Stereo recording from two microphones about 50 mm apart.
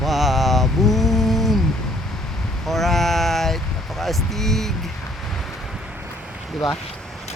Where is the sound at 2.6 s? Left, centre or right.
Centre.